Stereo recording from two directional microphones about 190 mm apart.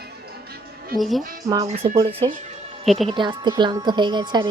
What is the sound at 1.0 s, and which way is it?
Speech, centre (ahead or behind).